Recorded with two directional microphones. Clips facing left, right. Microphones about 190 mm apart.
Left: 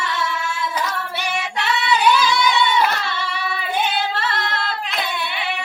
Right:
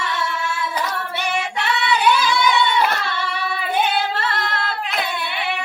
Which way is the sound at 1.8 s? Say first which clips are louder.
Left 1 dB; 55° right (ahead or behind).